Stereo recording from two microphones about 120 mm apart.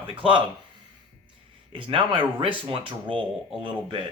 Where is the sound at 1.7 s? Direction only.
45° right (ahead or behind).